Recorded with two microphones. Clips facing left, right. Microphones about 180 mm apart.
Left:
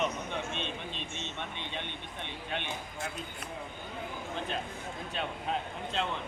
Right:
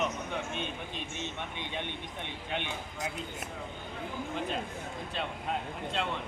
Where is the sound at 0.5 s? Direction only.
10° right (ahead or behind).